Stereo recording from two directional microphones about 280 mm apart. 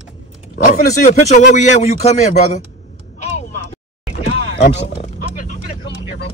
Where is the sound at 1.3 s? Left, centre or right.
Left.